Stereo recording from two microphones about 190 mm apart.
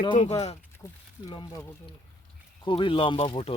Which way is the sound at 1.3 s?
25° left (ahead or behind).